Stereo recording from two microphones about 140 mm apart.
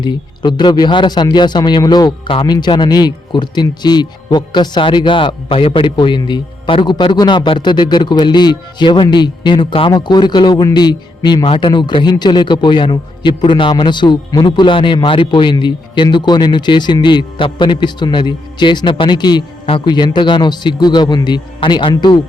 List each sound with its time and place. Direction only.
0.0 s speech: 30° left (ahead or behind)